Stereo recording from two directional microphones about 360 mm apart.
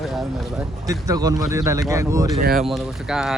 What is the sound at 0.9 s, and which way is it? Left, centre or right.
Speech, centre.